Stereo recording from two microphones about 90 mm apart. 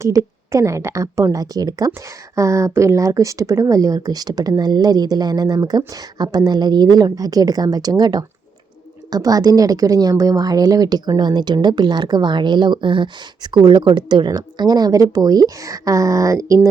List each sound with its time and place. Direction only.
0.0 s a woman's voice: 35° right (ahead or behind)